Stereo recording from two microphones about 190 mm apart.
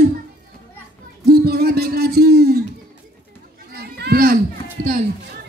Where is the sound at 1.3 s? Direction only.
55° right (ahead or behind).